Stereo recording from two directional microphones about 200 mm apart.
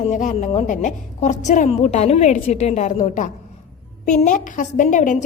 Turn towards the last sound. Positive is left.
turn(degrees=40)  # may be behind; listen again after turning